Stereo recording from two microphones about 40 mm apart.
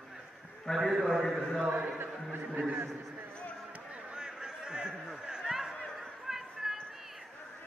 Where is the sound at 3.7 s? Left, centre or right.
Right.